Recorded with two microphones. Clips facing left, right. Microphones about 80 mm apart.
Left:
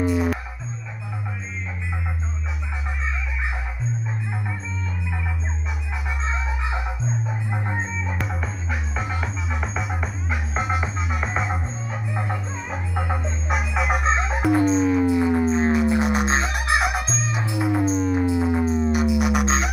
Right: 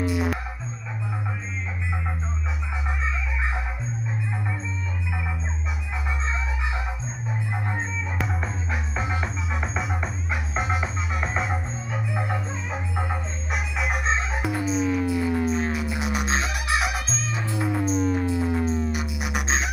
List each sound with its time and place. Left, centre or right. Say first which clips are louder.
0.0 s music: left 3 dB; centre
3.1 s music: even; centre
8.2 s music: even; centre
14.8 s fowl: left 5 dB; left
16.7 s fowl: left 4 dB; centre
17.2 s music: left 2 dB; centre
17.8 s music: left 2 dB; centre
18.1 s music: left 3 dB; centre
18.9 s music: left 9 dB; centre